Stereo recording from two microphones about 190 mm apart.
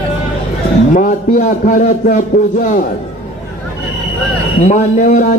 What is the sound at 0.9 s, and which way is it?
A man's voice, 45° left (ahead or behind).